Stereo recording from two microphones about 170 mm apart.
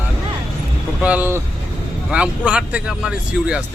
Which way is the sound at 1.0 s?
10° right (ahead or behind).